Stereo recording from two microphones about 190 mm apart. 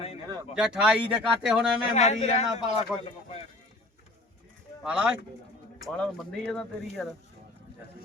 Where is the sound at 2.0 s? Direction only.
35° left (ahead or behind).